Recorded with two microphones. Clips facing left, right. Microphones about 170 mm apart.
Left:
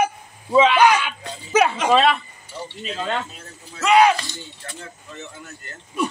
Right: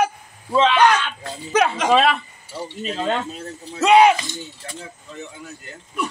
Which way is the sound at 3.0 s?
25° right (ahead or behind).